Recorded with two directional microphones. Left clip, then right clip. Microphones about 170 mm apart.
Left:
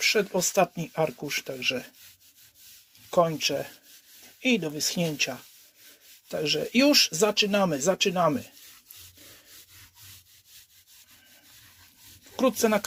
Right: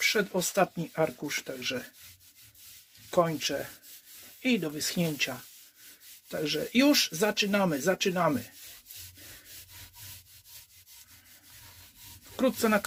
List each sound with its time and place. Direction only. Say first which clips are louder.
0.0 s speech: left 3 dB; 10° left (ahead or behind)
3.1 s speech: left 3 dB; 10° left (ahead or behind)
12.4 s speech: left 3 dB; 10° left (ahead or behind)